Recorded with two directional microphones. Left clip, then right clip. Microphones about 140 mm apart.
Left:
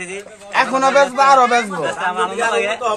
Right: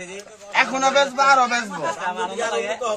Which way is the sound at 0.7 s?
55° left (ahead or behind).